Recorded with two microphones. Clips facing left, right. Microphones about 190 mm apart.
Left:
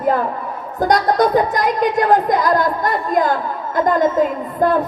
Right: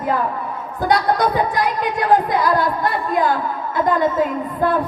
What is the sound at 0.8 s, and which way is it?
Speech, 45° left (ahead or behind).